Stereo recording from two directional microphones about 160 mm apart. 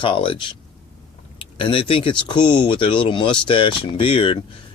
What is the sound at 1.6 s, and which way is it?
Speech, 30° left (ahead or behind).